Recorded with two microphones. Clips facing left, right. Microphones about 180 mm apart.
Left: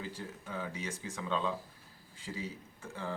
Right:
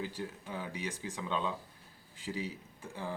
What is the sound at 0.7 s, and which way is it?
Speech, 15° right (ahead or behind).